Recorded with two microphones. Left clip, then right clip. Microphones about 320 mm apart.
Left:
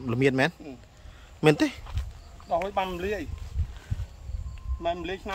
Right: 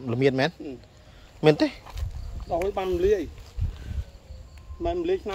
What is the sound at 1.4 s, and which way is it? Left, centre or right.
Speech, centre.